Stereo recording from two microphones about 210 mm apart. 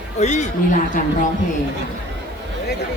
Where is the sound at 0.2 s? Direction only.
35° left (ahead or behind).